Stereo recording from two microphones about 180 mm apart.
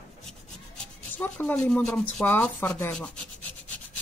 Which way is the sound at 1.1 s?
10° left (ahead or behind).